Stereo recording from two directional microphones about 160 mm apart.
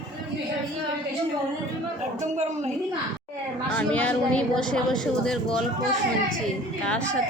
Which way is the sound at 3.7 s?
5° left (ahead or behind).